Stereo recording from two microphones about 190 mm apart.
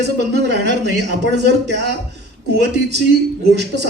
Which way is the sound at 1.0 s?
65° right (ahead or behind).